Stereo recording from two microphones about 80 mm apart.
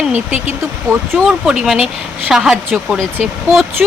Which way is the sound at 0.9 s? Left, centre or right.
Centre.